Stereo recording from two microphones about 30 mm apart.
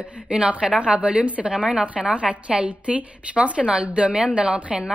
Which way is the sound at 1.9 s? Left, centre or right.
Right.